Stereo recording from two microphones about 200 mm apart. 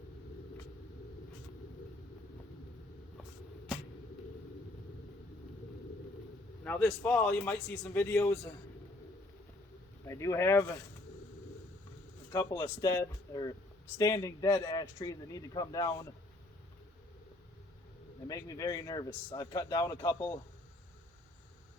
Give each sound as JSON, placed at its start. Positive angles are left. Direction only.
{"t": 6.7, "sound": "a man's voice", "side_deg": 5}
{"t": 10.1, "sound": "a man's voice", "side_deg": 15}
{"t": 12.3, "sound": "a man's voice", "side_deg": 15}
{"t": 18.3, "sound": "a man's voice", "side_deg": 15}